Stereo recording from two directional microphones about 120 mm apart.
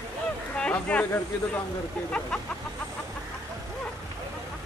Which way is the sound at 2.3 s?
5° left (ahead or behind).